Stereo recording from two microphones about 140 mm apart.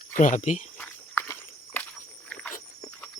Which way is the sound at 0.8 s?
15° left (ahead or behind).